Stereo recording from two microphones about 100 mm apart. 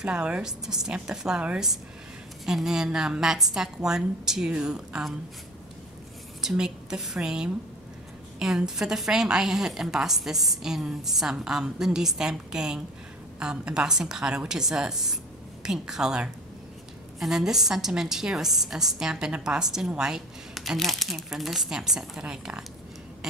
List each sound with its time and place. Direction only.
0.0 s a woman's voice: 10° right (ahead or behind)
6.4 s a woman's voice: 5° right (ahead or behind)